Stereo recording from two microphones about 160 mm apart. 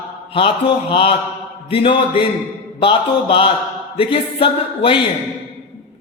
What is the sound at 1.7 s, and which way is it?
A woman's voice, 35° left (ahead or behind).